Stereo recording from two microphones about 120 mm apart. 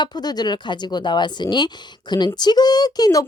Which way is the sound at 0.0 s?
35° left (ahead or behind).